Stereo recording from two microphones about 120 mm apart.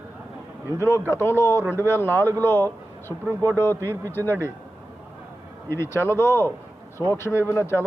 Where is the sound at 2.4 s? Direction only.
20° left (ahead or behind).